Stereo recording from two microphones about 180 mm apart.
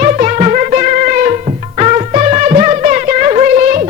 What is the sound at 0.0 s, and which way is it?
Music, 45° right (ahead or behind).